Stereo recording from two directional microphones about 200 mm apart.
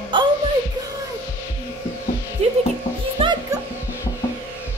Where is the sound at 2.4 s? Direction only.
30° right (ahead or behind).